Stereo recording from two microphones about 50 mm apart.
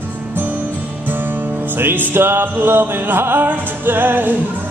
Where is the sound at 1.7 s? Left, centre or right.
Right.